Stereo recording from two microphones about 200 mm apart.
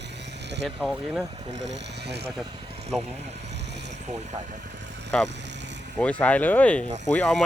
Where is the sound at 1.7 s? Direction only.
55° right (ahead or behind).